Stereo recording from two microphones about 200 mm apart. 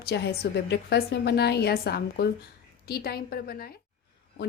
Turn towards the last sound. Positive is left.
turn(degrees=50)  # may be behind; listen again after turning